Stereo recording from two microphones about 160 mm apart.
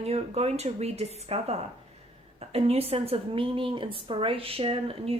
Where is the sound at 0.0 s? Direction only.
40° right (ahead or behind).